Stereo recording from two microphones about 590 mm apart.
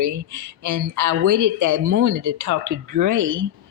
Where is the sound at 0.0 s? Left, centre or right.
Right.